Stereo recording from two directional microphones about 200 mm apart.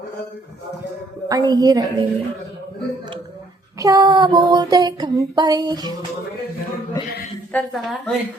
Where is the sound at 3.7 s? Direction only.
15° right (ahead or behind).